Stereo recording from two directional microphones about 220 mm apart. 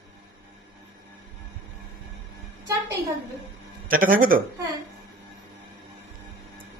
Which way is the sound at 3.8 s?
40° right (ahead or behind).